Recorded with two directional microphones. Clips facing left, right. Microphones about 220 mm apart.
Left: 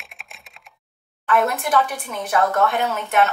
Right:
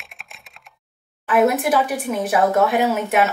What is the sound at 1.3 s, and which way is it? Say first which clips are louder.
A woman's voice: right 4 dB; 5° right (ahead or behind).